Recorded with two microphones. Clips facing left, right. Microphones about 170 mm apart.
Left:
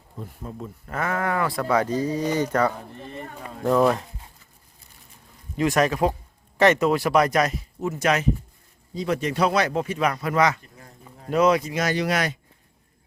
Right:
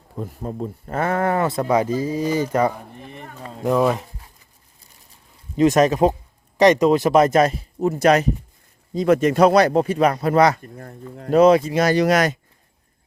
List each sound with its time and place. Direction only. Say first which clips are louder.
0.2 s speech: right 8 dB; 40° right (ahead or behind); by 4.0 s 5° right (ahead or behind)
5.5 s speech: right 6 dB; 20° right (ahead or behind); by 8.3 s 35° right (ahead or behind)
9.0 s speech: right 8 dB; 50° right (ahead or behind)
10.6 s speech: right 11 dB; 55° right (ahead or behind)
11.3 s speech: right 6 dB; 30° right (ahead or behind)